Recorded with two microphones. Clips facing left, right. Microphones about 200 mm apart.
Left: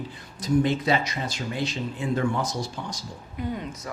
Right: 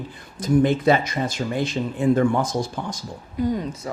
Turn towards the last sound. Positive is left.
turn(degrees=-35)  # may be behind; listen again after turning